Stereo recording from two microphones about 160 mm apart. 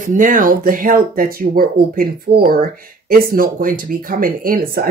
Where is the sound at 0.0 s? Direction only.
55° right (ahead or behind).